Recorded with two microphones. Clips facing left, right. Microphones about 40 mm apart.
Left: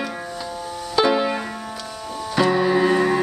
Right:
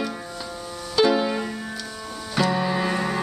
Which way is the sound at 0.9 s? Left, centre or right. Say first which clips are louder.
Left 1 dB; centre.